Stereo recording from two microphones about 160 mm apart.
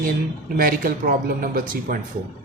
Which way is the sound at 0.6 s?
60° right (ahead or behind).